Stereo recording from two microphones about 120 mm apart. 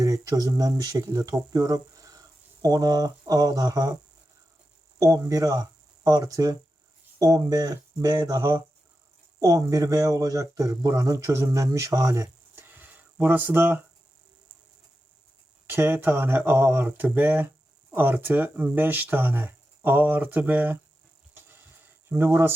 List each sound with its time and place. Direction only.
0.0 s speech: 30° right (ahead or behind)
4.9 s speech: 30° right (ahead or behind)
15.7 s speech: 15° right (ahead or behind)
22.1 s speech: 20° right (ahead or behind)